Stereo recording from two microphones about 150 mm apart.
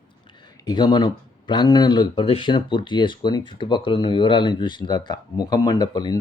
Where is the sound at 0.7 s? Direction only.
30° left (ahead or behind).